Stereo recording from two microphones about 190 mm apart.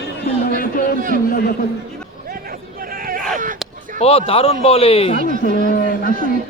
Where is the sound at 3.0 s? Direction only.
50° right (ahead or behind).